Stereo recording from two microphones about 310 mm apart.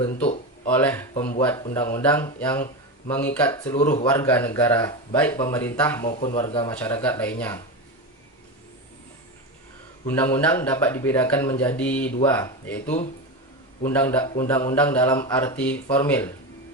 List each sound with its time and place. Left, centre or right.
0.7 s speech: centre
3.8 s a man's voice: left
4.0 s speech: centre
6.1 s a man's voice: left
10.1 s speech: centre